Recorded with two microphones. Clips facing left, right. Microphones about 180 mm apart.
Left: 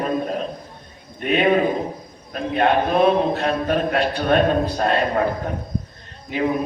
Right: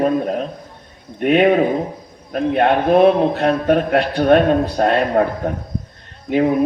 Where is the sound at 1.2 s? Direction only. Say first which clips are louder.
Right 4 dB; 55° right (ahead or behind).